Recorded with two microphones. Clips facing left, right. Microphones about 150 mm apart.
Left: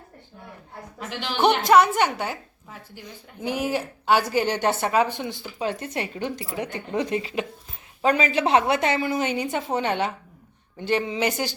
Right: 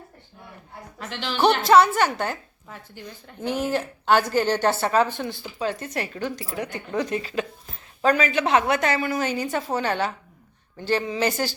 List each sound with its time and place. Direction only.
0.9 s a woman's voice: 10° left (ahead or behind)